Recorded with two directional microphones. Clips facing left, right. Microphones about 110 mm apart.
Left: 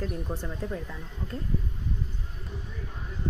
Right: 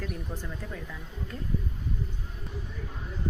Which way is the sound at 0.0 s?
35° left (ahead or behind).